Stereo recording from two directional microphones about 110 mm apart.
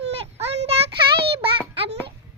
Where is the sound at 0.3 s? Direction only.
75° right (ahead or behind).